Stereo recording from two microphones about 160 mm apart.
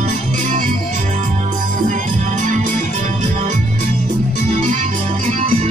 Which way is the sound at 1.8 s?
50° right (ahead or behind).